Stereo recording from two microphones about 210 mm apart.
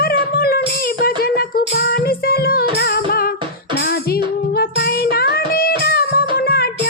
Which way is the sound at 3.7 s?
50° left (ahead or behind).